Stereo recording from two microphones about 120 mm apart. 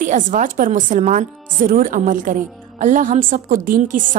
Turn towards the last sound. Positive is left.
turn(degrees=-90)